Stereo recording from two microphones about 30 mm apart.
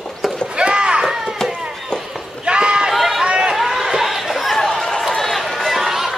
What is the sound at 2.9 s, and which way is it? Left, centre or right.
Chatter, centre.